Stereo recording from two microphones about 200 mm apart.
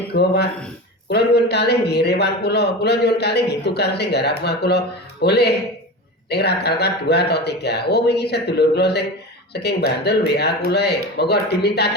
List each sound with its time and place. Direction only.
0.1 s speech: 55° left (ahead or behind)